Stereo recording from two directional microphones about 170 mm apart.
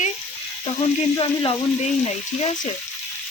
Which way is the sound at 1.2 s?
30° left (ahead or behind).